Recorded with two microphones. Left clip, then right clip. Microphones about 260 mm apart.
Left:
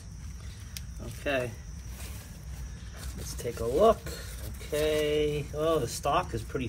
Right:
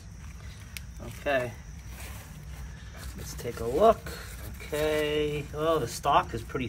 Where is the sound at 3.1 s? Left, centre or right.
Centre.